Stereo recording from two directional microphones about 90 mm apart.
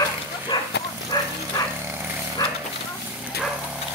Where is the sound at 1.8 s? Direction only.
25° right (ahead or behind).